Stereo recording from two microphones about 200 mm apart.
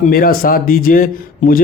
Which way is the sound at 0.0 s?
50° left (ahead or behind).